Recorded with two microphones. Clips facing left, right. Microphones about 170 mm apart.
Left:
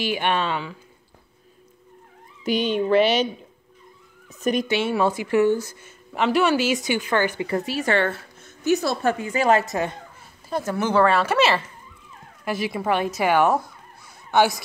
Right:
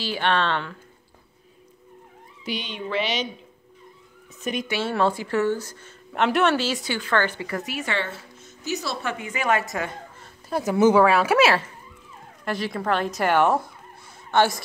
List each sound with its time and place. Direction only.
0.0 s a woman's voice: 15° left (ahead or behind)
2.4 s speech: 45° left (ahead or behind)
4.4 s speech: 40° left (ahead or behind)
4.6 s a woman's voice: 20° left (ahead or behind)
7.4 s a woman's voice: 30° left (ahead or behind)
7.9 s a woman's voice: 55° left (ahead or behind)
9.2 s a woman's voice: 35° left (ahead or behind)
10.6 s speech: 15° right (ahead or behind)
12.4 s a woman's voice: 5° left (ahead or behind)